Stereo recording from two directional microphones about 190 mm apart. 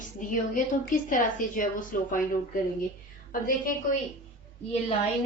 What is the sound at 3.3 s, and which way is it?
Speech, 45° left (ahead or behind).